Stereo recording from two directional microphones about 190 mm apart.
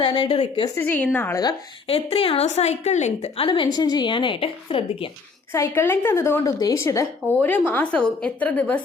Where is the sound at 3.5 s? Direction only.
25° left (ahead or behind).